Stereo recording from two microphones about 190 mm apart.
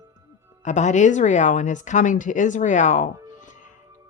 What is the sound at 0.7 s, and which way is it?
A woman's voice, 40° left (ahead or behind).